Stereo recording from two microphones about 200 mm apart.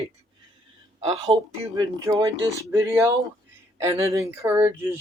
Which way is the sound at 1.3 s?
25° right (ahead or behind).